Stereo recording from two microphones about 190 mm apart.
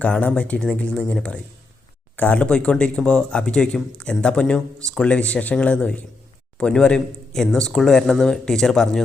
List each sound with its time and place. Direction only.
0.0 s speech: 5° left (ahead or behind)